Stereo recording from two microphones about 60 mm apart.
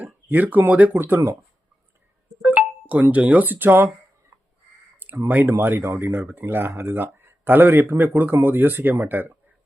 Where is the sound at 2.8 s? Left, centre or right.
Right.